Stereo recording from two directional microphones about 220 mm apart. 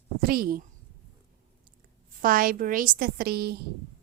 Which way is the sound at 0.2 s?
40° right (ahead or behind).